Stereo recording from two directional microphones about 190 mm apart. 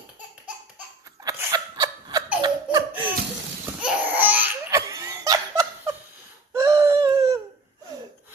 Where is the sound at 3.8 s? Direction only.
10° right (ahead or behind).